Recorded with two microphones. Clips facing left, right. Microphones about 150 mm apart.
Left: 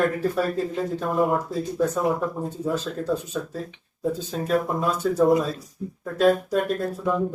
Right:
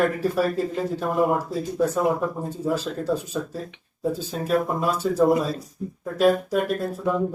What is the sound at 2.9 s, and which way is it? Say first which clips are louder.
Speech: right 1 dB; 10° right (ahead or behind).